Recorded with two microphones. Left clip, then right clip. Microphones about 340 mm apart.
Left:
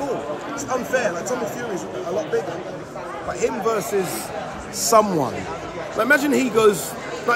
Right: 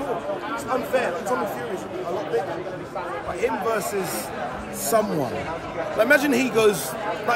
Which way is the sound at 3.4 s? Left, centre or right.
Left.